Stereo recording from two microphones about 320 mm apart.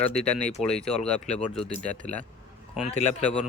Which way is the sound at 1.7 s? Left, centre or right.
Centre.